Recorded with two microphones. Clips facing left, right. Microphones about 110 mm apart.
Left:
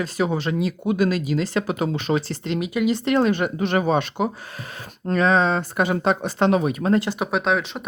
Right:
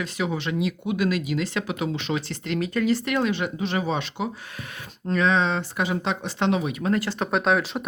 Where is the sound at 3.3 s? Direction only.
50° left (ahead or behind).